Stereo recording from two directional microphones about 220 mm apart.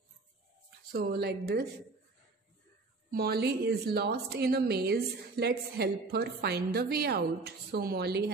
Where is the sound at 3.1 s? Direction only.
45° right (ahead or behind).